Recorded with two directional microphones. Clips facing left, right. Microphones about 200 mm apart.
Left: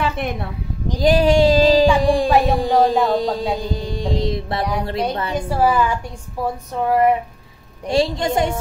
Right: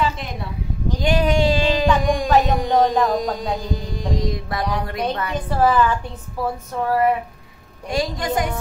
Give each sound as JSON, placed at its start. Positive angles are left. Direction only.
{"t": 0.0, "sound": "speech", "side_deg": 60}
{"t": 1.0, "sound": "a sound", "side_deg": 35}
{"t": 2.0, "sound": "music", "side_deg": 30}
{"t": 2.4, "sound": "a woman's voice", "side_deg": 30}
{"t": 3.5, "sound": "mantra", "side_deg": 30}
{"t": 5.3, "sound": "a woman's voice", "side_deg": 10}